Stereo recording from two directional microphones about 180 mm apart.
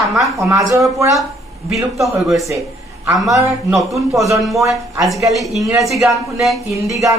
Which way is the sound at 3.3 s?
20° right (ahead or behind).